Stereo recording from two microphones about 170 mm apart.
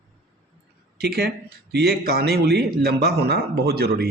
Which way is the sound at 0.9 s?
70° right (ahead or behind).